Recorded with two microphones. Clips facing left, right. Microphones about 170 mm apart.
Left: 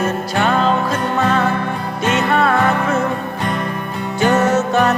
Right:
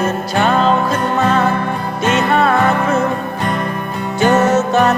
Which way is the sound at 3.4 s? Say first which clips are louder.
Right 2 dB; 50° right (ahead or behind).